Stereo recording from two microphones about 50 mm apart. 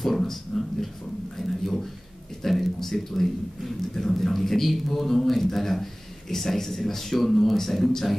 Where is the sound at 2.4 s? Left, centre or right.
Centre.